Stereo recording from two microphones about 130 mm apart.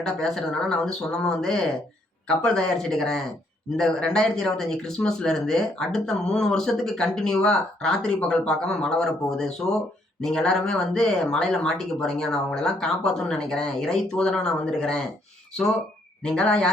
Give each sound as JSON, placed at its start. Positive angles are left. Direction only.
{"t": 0.0, "sound": "speech", "side_deg": 5}
{"t": 16.2, "sound": "speech", "side_deg": 5}